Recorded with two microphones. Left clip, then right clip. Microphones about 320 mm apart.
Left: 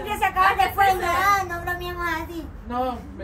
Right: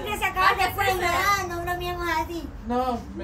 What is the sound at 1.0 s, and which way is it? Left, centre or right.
Child singing, centre.